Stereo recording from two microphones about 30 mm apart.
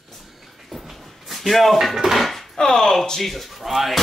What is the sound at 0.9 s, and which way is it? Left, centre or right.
Dishes, centre.